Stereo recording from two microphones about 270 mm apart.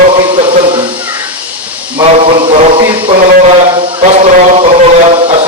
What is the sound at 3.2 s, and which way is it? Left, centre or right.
Speech, right.